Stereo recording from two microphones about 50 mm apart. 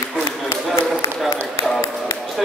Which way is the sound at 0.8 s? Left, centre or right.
Left.